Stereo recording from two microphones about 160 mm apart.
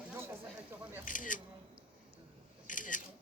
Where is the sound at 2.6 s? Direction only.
55° left (ahead or behind).